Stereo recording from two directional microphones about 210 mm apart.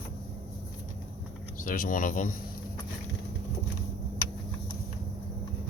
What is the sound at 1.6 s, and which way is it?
Speech, 40° left (ahead or behind).